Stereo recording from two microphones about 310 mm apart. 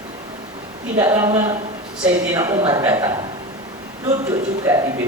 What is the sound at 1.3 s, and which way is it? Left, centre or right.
Speech, centre.